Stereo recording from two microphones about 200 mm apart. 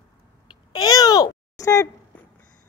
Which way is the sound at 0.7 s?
20° left (ahead or behind).